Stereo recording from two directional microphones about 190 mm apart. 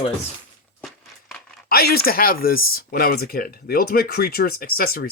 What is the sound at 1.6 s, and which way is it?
Speech, 55° left (ahead or behind).